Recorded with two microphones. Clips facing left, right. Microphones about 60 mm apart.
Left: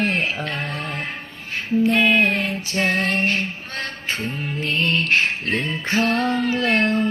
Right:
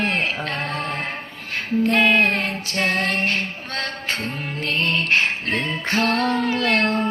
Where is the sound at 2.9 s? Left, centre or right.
Right.